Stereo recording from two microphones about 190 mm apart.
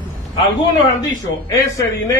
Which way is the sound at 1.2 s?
20° left (ahead or behind).